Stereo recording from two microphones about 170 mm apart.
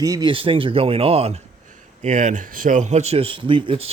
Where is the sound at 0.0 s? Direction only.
25° right (ahead or behind).